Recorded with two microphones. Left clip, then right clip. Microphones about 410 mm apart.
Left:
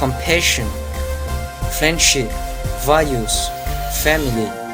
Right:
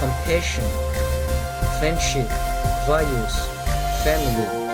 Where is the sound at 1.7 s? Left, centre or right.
Right.